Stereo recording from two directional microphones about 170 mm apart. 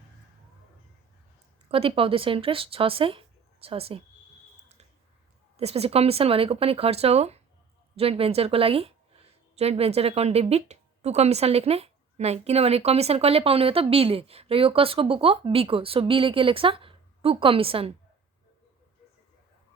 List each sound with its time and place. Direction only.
1.7 s a woman's voice: 35° right (ahead or behind)
5.5 s a woman's voice: 35° right (ahead or behind)